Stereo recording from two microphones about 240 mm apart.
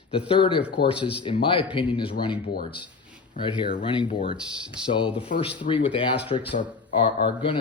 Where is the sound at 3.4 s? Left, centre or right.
Centre.